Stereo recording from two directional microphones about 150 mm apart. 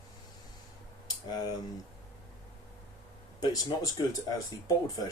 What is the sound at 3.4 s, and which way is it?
Speech, 25° left (ahead or behind).